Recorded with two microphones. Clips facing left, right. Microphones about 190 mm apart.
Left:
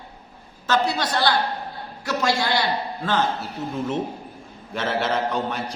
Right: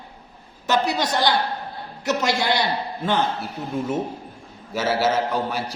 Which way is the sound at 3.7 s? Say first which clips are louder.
Right 2 dB; 10° right (ahead or behind).